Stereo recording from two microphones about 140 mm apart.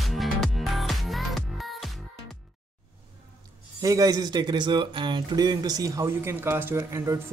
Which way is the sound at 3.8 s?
25° right (ahead or behind).